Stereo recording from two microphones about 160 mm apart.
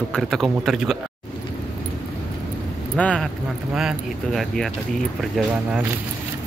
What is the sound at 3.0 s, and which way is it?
A man's voice, 5° left (ahead or behind).